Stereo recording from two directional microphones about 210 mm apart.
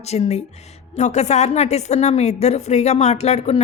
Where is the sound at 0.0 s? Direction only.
30° left (ahead or behind).